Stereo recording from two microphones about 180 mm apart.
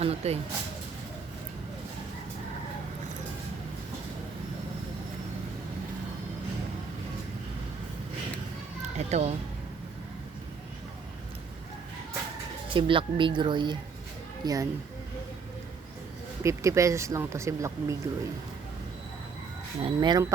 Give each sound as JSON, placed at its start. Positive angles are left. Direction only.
{"t": 0.0, "sound": "speech", "side_deg": -35}
{"t": 9.0, "sound": "speech", "side_deg": -40}
{"t": 12.7, "sound": "speech", "side_deg": -30}
{"t": 16.4, "sound": "speech", "side_deg": -15}
{"t": 19.8, "sound": "speech", "side_deg": -25}